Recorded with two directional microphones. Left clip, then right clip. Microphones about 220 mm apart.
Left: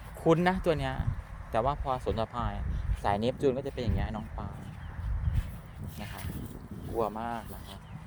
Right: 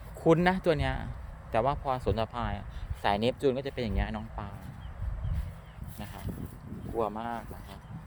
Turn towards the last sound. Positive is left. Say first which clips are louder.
# even
turn(degrees=10)  # may be behind; listen again after turning